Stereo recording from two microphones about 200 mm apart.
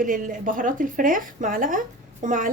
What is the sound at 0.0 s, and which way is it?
A woman's voice, 45° right (ahead or behind).